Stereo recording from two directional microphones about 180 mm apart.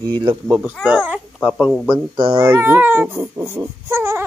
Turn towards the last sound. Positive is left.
turn(degrees=-15)  # may be behind; listen again after turning